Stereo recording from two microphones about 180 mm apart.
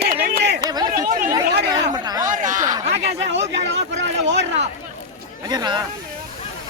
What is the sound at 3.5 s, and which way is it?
Speech, 80° right.